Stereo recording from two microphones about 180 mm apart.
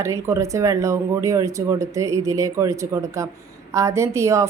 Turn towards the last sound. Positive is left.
turn(degrees=-15)  # may be behind; listen again after turning